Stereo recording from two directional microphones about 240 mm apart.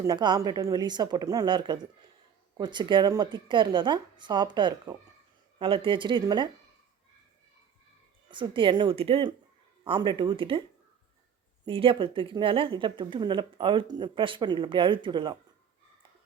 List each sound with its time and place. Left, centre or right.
0.0 s a woman's voice: centre
8.3 s a woman's voice: right
11.6 s a woman's voice: right